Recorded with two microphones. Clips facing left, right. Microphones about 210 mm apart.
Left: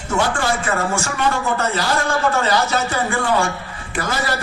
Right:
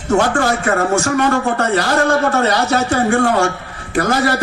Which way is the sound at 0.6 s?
60° right (ahead or behind).